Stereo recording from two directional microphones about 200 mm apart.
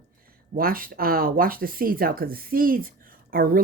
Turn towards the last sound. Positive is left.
turn(degrees=-45)  # may be behind; listen again after turning